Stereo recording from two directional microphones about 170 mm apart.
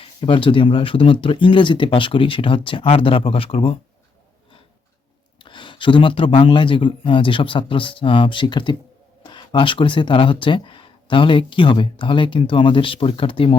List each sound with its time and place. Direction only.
0.0 s speech: 30° left (ahead or behind)
5.4 s speech: 30° left (ahead or behind)